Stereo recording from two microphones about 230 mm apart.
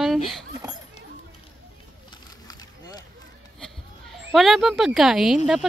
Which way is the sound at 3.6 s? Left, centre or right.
Centre.